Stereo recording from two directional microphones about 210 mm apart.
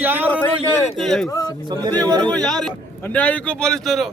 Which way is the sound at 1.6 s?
20° right (ahead or behind).